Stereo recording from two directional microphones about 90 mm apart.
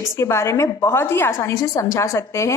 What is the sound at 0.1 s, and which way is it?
A woman's voice, 35° left (ahead or behind).